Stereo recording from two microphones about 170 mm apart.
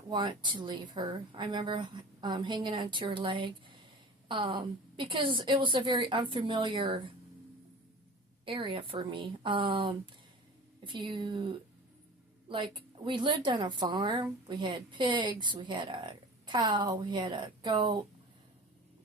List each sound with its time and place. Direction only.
0.1 s a woman's voice: 25° right (ahead or behind)
8.4 s a woman's voice: 30° right (ahead or behind)
12.5 s a woman's voice: 30° right (ahead or behind)